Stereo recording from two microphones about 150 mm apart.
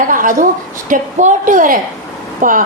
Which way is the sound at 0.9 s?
60° right (ahead or behind).